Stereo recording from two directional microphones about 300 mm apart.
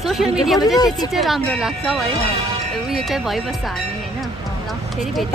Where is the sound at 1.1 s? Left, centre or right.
Centre.